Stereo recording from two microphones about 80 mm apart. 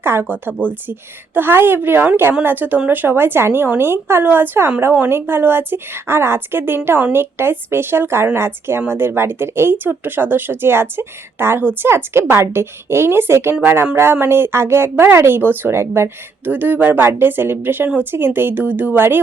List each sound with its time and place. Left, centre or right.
0.0 s speech: right